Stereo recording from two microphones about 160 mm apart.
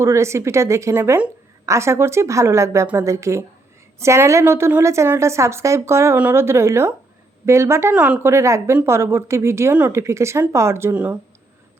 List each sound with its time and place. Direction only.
0.0 s speech: 15° right (ahead or behind)